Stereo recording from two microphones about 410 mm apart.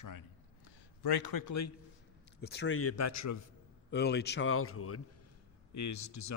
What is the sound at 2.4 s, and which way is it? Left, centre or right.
Speech, left.